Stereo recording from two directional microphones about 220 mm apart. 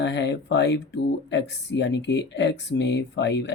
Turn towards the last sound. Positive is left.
turn(degrees=55)  # may be behind; listen again after turning